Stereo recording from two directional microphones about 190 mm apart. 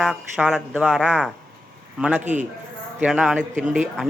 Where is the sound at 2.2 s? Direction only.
40° right (ahead or behind).